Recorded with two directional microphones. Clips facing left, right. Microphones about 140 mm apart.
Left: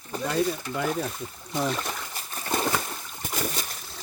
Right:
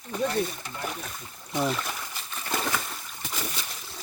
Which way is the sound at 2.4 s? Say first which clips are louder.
Left 3 dB; 25° left (ahead or behind).